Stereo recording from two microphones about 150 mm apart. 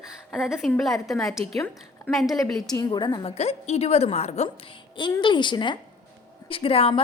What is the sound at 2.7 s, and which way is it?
Speech, 30° left (ahead or behind).